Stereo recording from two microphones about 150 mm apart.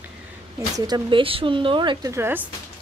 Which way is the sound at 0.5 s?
25° right (ahead or behind).